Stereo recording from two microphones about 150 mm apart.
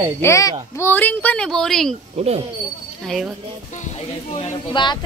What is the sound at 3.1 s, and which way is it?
Speech, centre (ahead or behind).